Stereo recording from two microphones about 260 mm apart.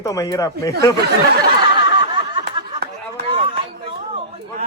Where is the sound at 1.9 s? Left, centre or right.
Centre.